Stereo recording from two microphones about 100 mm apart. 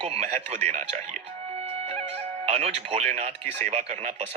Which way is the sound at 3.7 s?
90° right.